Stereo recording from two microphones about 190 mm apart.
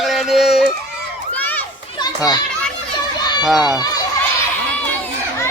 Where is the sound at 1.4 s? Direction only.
10° left (ahead or behind).